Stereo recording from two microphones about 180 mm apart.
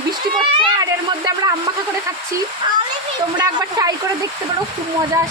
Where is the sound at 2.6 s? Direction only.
25° right (ahead or behind).